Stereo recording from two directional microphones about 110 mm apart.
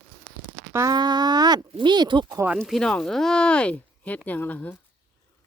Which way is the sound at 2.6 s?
5° left (ahead or behind).